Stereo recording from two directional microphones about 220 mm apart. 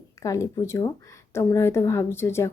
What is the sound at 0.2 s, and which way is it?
A woman's voice, 15° left (ahead or behind).